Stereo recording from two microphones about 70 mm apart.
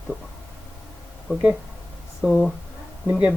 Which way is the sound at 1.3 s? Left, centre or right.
Right.